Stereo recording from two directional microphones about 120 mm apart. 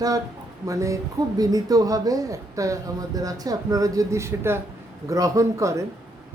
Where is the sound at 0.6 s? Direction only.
25° right (ahead or behind).